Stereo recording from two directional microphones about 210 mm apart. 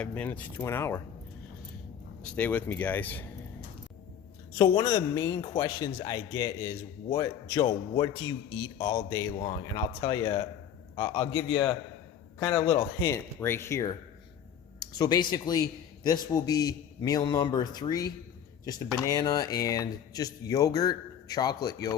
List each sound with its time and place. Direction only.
0.0 s a man's voice: 5° left (ahead or behind)
2.2 s a man's voice: 5° left (ahead or behind)
4.5 s a man's voice: 20° left (ahead or behind)
12.4 s a man's voice: 10° left (ahead or behind)